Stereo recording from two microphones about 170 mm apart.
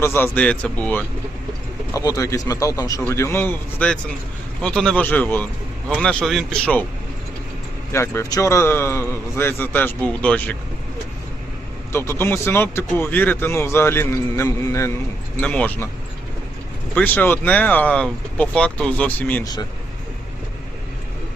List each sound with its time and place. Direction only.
0.0 s speech: 15° left (ahead or behind)
1.9 s speech: 20° left (ahead or behind)
7.9 s speech: 15° left (ahead or behind)
11.9 s speech: 15° left (ahead or behind)
15.4 s speech: 5° left (ahead or behind)
16.9 s speech: 10° left (ahead or behind)